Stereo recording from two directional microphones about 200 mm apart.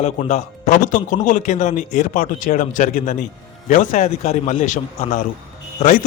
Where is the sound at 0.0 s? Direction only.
35° left (ahead or behind).